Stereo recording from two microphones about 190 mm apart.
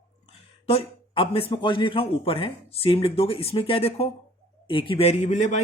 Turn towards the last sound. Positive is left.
turn(degrees=40)  # may be behind; listen again after turning